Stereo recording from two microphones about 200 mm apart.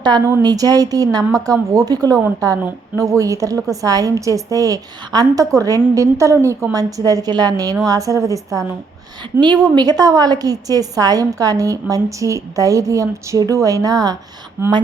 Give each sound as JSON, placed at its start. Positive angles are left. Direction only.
{"t": 0.3, "sound": "a woman's voice", "side_deg": -15}
{"t": 9.7, "sound": "a woman's voice", "side_deg": -20}